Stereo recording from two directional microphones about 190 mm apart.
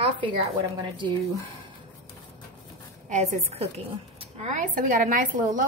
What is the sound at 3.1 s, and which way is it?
A woman's voice, 35° right (ahead or behind).